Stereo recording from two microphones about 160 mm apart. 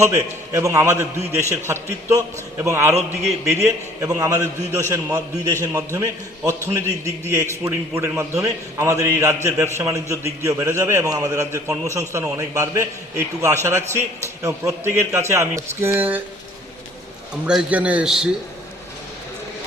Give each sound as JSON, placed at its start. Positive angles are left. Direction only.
{"t": 0.0, "sound": "a man's voice", "side_deg": -20}
{"t": 4.0, "sound": "a man's voice", "side_deg": -20}
{"t": 17.4, "sound": "a man's voice", "side_deg": -5}